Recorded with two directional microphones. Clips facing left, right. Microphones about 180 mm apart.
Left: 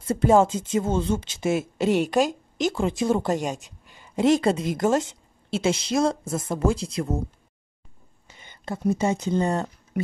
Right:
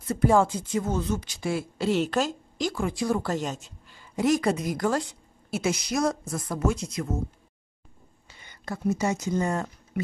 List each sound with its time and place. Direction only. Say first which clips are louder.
0.0 s speech: left 3 dB; 25° left (ahead or behind)
8.3 s speech: left 3 dB; 20° left (ahead or behind)